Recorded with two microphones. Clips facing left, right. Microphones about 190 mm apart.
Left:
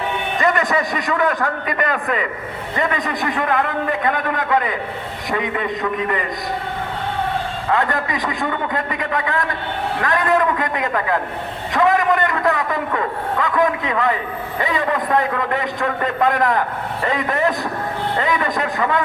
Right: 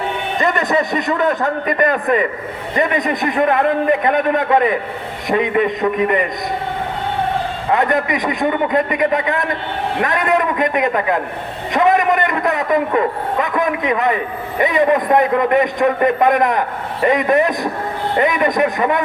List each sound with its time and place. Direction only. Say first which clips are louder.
0.3 s a man's voice: right 2 dB; 20° right (ahead or behind)
7.7 s a man's voice: right 4 dB; 20° right (ahead or behind)